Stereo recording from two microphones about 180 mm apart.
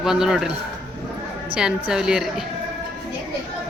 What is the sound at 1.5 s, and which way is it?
Speech, 5° right (ahead or behind).